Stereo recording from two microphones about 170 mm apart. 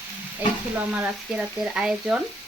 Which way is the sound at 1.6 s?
5° right (ahead or behind).